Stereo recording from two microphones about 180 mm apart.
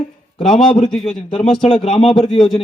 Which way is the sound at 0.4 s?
Centre (ahead or behind).